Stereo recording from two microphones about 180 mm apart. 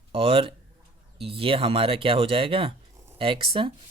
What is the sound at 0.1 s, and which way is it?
Speech, 30° right (ahead or behind).